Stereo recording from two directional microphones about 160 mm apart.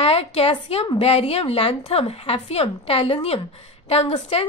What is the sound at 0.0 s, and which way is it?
A woman's voice, 40° left (ahead or behind).